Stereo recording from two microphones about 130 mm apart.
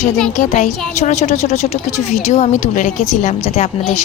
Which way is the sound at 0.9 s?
60° left (ahead or behind).